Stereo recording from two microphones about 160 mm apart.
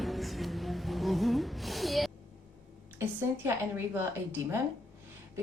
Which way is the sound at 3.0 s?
15° right (ahead or behind).